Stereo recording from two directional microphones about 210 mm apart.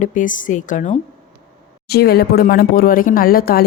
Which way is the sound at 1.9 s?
50° left (ahead or behind).